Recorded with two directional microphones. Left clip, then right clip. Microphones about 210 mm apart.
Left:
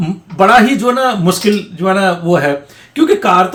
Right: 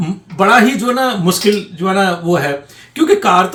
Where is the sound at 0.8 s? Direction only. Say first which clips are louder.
Left 2 dB; 15° left (ahead or behind).